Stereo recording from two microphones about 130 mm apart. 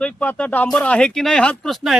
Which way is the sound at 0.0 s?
10° left (ahead or behind).